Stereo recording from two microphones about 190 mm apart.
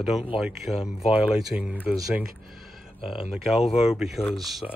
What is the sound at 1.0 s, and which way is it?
Speech, 30° left (ahead or behind).